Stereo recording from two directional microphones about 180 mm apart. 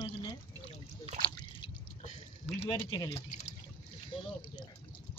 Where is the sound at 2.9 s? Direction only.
25° left (ahead or behind).